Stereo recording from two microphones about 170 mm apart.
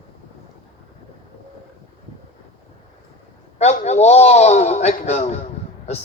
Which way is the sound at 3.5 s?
40° left (ahead or behind).